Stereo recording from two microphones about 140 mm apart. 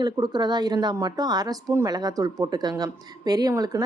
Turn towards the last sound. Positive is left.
turn(degrees=-25)  # may be behind; listen again after turning